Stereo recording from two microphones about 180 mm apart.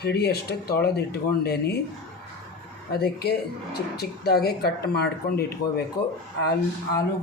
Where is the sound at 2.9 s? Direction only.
60° left (ahead or behind).